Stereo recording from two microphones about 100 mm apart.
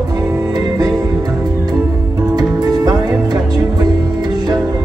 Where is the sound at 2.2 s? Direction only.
40° right (ahead or behind).